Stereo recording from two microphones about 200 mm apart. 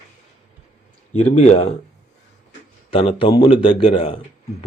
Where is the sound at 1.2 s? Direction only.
30° left (ahead or behind).